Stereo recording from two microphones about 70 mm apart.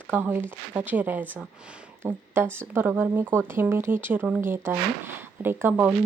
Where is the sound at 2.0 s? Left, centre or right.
Right.